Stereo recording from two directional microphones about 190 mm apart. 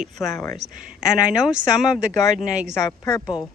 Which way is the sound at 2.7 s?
15° left (ahead or behind).